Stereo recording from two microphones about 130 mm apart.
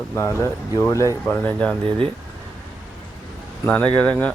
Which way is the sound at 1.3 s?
10° left (ahead or behind).